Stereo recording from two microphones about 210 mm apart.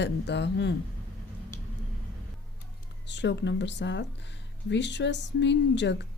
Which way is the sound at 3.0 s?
55° left (ahead or behind).